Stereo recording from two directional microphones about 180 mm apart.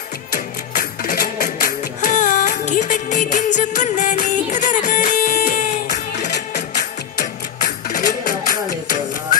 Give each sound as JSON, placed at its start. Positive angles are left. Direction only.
{"t": 0.7, "sound": "music", "side_deg": 50}
{"t": 7.2, "sound": "music", "side_deg": 45}